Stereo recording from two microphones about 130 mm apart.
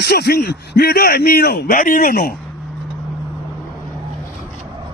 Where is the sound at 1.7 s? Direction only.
90° left.